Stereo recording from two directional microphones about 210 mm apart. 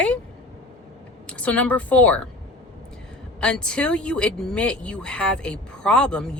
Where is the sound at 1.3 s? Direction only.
5° left (ahead or behind).